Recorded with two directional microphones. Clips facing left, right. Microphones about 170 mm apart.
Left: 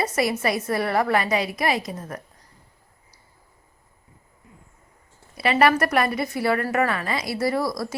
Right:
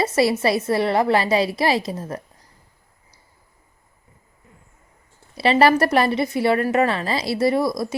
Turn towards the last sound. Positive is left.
turn(degrees=-20)  # may be behind; listen again after turning